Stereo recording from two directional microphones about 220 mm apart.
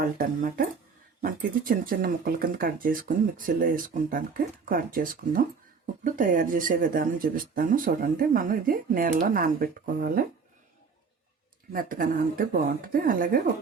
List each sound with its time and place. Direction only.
0.0 s speech: 40° right (ahead or behind)
11.7 s speech: 40° right (ahead or behind)